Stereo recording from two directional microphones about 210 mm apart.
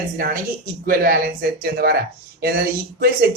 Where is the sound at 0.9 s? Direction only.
45° right (ahead or behind).